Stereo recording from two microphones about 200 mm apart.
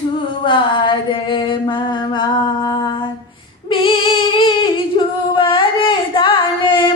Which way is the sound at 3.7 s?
25° left (ahead or behind).